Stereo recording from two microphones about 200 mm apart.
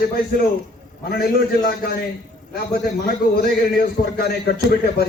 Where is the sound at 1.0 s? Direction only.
50° left (ahead or behind).